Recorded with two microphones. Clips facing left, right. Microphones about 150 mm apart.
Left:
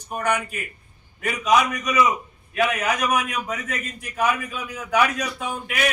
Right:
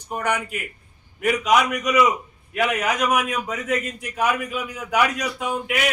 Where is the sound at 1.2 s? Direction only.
20° right (ahead or behind).